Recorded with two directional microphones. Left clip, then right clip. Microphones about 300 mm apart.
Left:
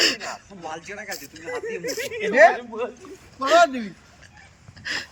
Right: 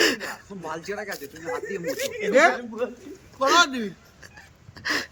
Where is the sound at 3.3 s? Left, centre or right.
Centre.